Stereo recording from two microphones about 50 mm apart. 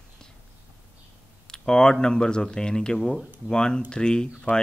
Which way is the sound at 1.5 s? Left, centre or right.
Centre.